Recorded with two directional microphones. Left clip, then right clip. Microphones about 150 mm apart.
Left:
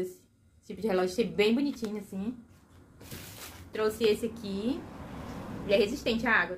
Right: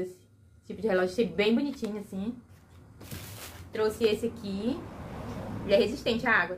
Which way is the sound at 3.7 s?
20° left (ahead or behind).